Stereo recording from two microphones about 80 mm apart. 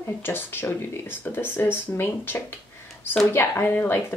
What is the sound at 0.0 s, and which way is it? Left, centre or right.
Speech, left.